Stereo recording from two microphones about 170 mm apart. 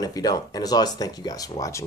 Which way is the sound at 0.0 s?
20° left (ahead or behind).